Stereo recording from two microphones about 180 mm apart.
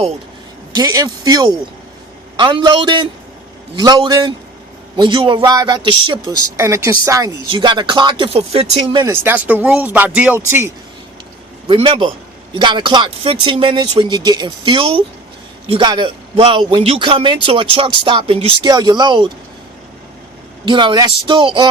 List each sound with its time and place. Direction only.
0.8 s a man's voice: 20° right (ahead or behind)
9.0 s speech: 10° right (ahead or behind)
11.7 s a man's voice: 30° right (ahead or behind)
20.7 s a man's voice: 25° right (ahead or behind)